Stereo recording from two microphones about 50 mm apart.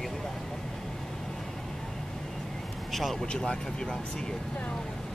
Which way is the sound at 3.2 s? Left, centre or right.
Centre.